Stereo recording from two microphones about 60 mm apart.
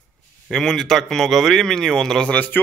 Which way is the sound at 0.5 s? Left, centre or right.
Centre.